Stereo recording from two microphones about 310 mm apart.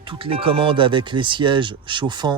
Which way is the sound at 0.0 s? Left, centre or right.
Centre.